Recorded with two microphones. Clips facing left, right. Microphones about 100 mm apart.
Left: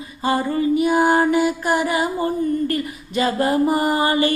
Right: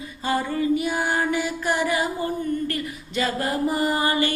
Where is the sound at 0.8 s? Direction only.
40° left (ahead or behind); by 3.4 s 25° left (ahead or behind).